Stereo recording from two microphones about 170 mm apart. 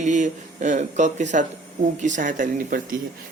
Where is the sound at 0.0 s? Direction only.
45° right (ahead or behind).